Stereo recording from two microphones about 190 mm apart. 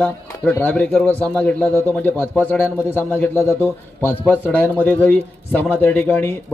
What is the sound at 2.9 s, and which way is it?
Speech, 10° left (ahead or behind).